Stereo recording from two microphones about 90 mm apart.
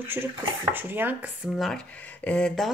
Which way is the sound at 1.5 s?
Centre (ahead or behind).